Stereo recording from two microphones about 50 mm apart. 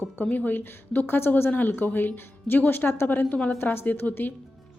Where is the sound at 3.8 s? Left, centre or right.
Left.